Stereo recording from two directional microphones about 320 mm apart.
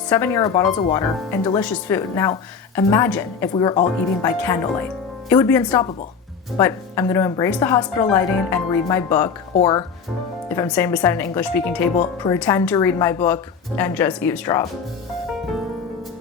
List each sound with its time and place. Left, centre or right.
0.1 s speech: centre